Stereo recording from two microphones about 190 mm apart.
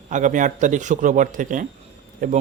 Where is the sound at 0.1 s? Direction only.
40° right (ahead or behind).